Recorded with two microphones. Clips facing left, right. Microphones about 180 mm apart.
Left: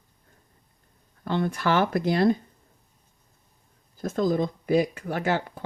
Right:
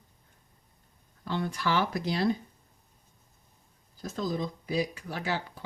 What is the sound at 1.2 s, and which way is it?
Speech, 55° left (ahead or behind).